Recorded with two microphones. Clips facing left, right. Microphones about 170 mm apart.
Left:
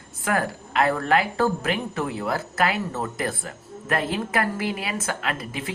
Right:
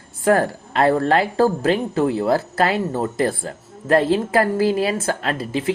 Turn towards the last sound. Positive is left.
turn(degrees=-30)  # may be behind; listen again after turning